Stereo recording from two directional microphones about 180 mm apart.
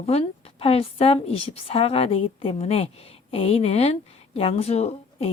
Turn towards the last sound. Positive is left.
turn(degrees=35)  # may be behind; listen again after turning